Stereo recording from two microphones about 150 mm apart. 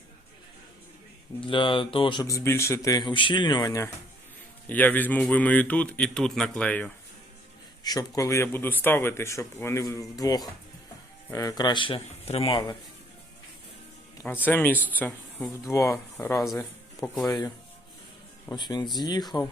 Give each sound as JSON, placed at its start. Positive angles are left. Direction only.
{"t": 1.4, "sound": "speech", "side_deg": 35}
{"t": 2.2, "sound": "speech", "side_deg": 20}
{"t": 4.7, "sound": "a man's voice", "side_deg": 10}
{"t": 7.9, "sound": "speech", "side_deg": 25}
{"t": 14.4, "sound": "a man's voice", "side_deg": 10}
{"t": 17.2, "sound": "speech", "side_deg": 25}
{"t": 18.5, "sound": "speech", "side_deg": 30}